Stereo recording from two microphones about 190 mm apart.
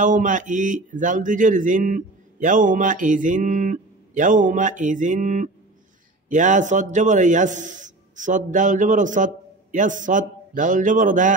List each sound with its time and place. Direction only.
0.0 s a man's voice: 40° right (ahead or behind)